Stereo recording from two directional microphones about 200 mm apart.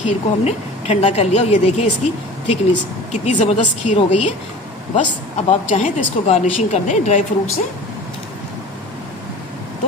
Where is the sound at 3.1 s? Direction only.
35° left (ahead or behind).